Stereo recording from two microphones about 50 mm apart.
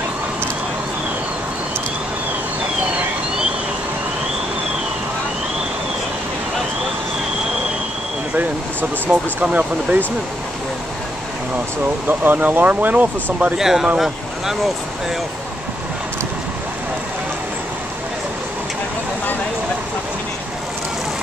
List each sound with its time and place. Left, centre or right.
9.0 s speech: right
12.1 s speech: right
13.6 s speech: centre